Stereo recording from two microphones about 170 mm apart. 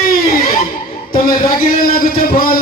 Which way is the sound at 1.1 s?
55° left (ahead or behind).